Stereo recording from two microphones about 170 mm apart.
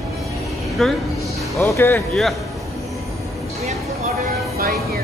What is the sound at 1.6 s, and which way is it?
Speech, 15° left (ahead or behind).